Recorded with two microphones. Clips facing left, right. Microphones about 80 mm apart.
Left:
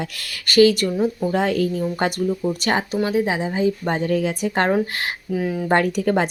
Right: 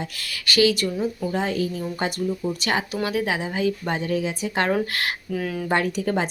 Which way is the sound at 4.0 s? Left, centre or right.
Left.